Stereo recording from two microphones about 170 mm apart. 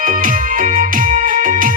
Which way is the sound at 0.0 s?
50° right (ahead or behind).